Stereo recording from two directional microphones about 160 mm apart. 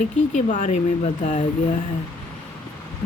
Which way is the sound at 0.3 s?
50° left (ahead or behind).